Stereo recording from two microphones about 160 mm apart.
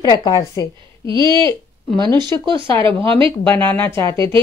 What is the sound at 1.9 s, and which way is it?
Speech, 30° right (ahead or behind).